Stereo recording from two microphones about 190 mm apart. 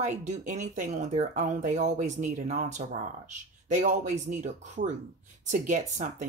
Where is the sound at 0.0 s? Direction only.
40° right (ahead or behind).